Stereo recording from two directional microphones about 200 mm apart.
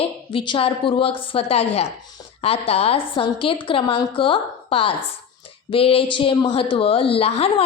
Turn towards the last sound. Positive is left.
turn(degrees=30)  # may be behind; listen again after turning